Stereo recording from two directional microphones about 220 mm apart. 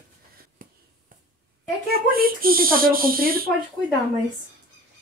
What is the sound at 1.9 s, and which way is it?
Speech, 45° right (ahead or behind).